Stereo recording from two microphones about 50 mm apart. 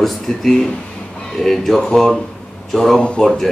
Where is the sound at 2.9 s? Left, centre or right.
Centre.